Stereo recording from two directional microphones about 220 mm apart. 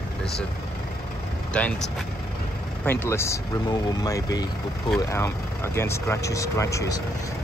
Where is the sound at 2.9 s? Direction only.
10° left (ahead or behind).